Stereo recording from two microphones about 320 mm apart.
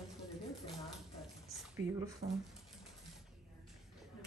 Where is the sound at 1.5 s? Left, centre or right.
Centre.